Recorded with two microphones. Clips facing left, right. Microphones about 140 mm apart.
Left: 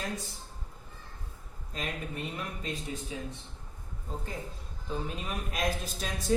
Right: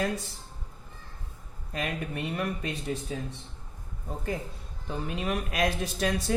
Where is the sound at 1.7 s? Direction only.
65° right (ahead or behind).